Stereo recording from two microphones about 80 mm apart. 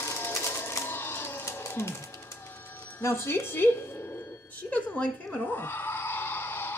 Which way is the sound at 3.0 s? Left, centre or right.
Left.